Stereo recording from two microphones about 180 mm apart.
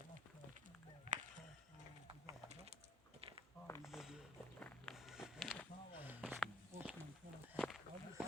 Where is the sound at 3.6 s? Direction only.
15° left (ahead or behind).